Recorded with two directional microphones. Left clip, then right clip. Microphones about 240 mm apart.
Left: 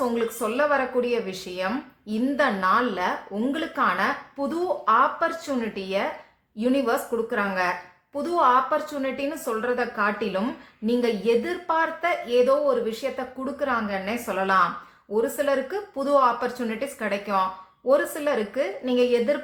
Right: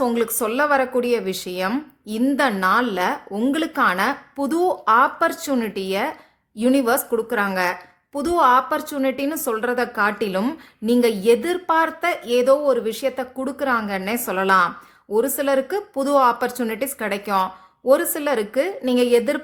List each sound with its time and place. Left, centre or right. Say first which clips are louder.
0.0 s a woman's voice: right 4 dB; right